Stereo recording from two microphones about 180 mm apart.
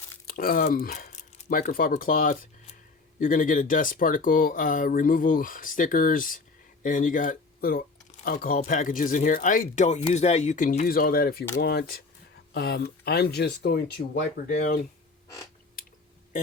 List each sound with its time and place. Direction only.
0.3 s speech: 55° left (ahead or behind)